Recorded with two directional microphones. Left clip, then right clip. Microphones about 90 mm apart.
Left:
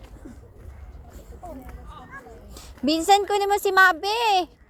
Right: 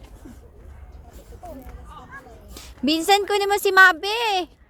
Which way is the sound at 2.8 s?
40° right (ahead or behind).